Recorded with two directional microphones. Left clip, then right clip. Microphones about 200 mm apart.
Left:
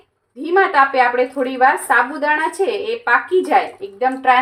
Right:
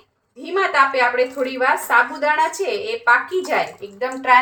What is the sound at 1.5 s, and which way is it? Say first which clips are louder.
Speech: left 5 dB; 35° left (ahead or behind).